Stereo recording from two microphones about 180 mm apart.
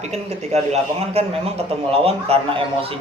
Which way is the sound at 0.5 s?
35° right (ahead or behind).